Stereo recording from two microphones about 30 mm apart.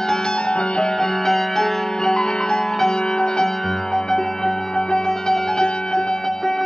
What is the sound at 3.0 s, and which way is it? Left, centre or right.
Music, left.